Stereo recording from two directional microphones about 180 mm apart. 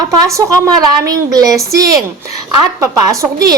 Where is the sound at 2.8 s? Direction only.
20° right (ahead or behind).